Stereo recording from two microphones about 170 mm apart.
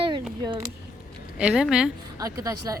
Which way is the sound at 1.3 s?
5° right (ahead or behind).